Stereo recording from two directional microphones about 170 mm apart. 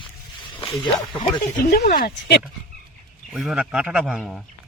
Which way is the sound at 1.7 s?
65° left (ahead or behind).